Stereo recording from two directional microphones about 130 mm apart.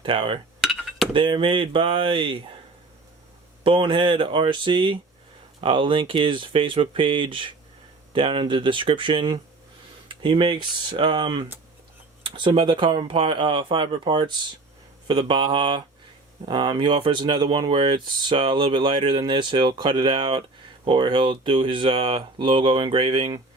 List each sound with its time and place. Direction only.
0.0 s speech: 40° right (ahead or behind)
0.6 s dishes: centre (ahead or behind)
1.1 s speech: 40° right (ahead or behind)
3.6 s speech: 45° right (ahead or behind)